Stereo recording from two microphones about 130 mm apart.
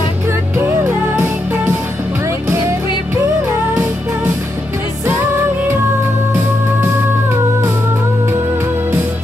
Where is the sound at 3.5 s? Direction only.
15° right (ahead or behind).